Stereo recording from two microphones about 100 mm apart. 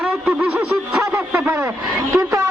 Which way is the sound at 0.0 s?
10° right (ahead or behind).